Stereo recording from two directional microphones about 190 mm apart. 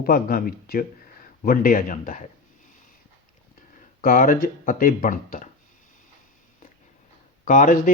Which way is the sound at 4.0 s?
45° left (ahead or behind).